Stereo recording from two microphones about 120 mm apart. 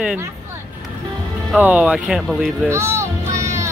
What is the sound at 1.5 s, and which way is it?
Speech, 10° right (ahead or behind).